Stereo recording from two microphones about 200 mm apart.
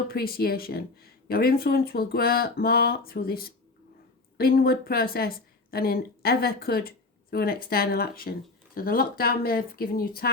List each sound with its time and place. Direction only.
0.1 s a woman's voice: 50° left (ahead or behind)